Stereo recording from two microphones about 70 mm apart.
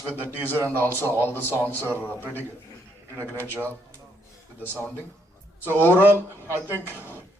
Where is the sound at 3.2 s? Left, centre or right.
Right.